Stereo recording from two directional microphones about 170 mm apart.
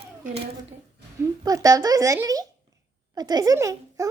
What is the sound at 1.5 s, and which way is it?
A woman's voice, 20° right (ahead or behind).